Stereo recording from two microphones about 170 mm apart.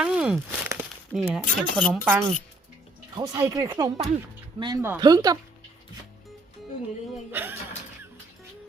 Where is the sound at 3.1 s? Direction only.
20° right (ahead or behind).